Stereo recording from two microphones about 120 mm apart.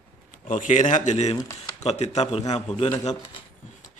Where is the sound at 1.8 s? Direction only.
65° left (ahead or behind).